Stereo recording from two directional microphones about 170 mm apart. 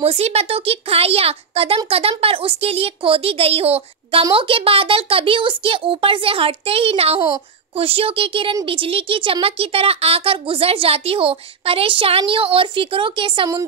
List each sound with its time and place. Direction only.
0.0 s speech: 35° right (ahead or behind)